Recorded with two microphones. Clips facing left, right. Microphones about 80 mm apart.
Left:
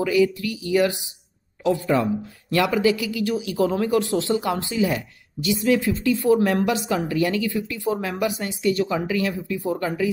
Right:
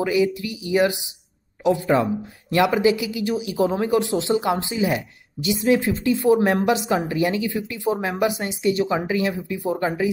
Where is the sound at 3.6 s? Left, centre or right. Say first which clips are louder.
Even; right.